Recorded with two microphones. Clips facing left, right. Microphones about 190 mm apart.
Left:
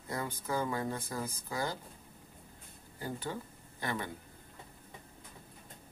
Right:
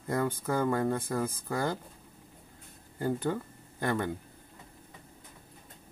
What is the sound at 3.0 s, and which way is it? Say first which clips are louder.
Speech: right 9 dB; 55° right (ahead or behind).